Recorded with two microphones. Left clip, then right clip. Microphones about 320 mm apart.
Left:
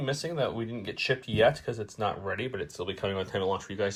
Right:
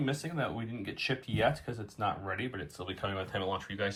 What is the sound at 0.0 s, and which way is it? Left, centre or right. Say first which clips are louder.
Speech: left 5 dB; centre.